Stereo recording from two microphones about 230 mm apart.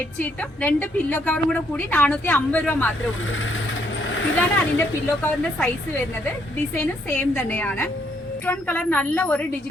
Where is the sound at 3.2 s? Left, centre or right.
Left.